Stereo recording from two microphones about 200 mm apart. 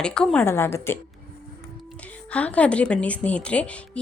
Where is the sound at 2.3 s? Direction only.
5° left (ahead or behind).